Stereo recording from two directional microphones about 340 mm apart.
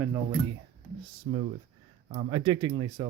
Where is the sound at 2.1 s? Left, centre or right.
Centre.